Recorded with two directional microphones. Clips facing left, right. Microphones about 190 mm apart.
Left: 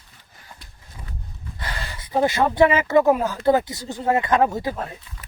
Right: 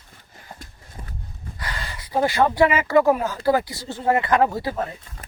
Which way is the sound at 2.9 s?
20° left (ahead or behind).